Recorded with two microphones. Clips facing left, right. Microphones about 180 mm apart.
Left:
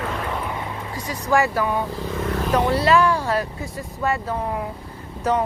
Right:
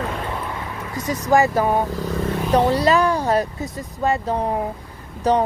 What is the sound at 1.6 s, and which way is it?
Speech, 40° right (ahead or behind).